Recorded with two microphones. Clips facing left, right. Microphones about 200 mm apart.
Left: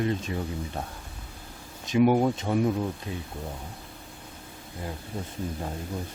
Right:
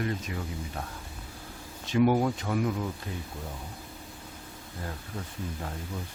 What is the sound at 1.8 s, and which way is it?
Speech, 20° left (ahead or behind).